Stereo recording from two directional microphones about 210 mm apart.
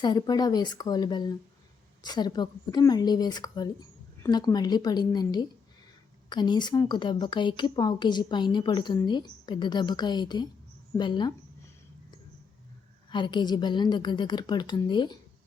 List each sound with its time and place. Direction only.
0.0 s a woman's voice: 20° left (ahead or behind)
13.1 s a woman's voice: 20° left (ahead or behind)